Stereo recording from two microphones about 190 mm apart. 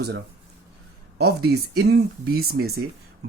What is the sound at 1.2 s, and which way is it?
Speech, 60° right (ahead or behind).